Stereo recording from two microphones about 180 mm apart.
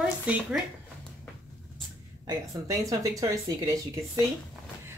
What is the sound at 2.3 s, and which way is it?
Speech, 20° right (ahead or behind).